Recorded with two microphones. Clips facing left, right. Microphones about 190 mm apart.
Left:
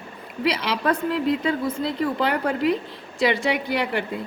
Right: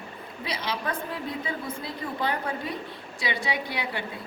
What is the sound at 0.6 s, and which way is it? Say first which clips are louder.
A woman's voice: left 8 dB; 80° left.